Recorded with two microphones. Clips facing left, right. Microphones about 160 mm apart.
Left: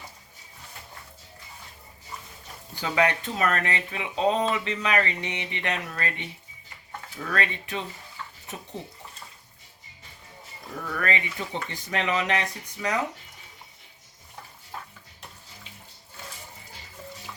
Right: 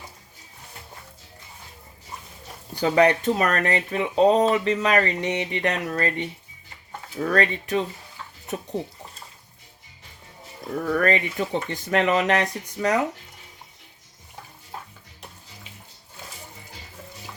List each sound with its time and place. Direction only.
2.7 s speech: 40° right (ahead or behind)
7.2 s speech: 40° right (ahead or behind)
10.9 s speech: 45° right (ahead or behind)